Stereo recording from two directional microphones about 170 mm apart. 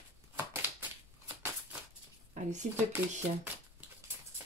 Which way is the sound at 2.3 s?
45° right (ahead or behind).